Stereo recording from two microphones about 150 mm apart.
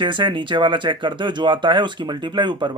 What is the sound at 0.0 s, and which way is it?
Speech, 30° right (ahead or behind).